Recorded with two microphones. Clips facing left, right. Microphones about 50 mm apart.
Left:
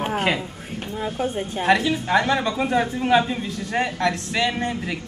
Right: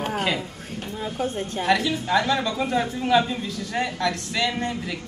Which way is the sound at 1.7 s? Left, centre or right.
Left.